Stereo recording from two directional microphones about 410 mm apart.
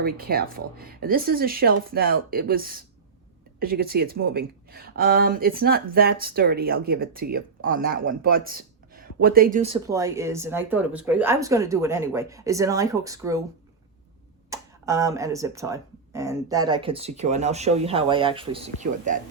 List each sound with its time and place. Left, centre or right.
0.0 s speech: right
14.5 s speech: centre